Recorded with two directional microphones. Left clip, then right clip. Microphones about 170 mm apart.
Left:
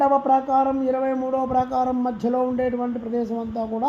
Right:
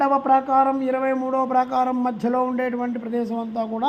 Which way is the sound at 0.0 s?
10° right (ahead or behind).